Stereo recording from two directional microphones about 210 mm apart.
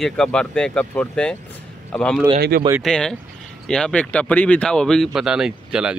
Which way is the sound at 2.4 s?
45° right (ahead or behind).